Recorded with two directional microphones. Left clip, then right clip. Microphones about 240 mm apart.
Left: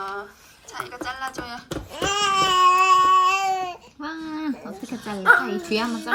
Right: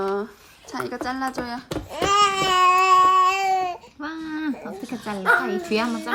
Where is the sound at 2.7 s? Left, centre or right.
Centre.